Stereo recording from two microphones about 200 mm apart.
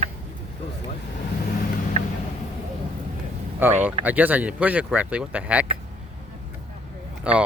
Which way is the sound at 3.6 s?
10° right (ahead or behind).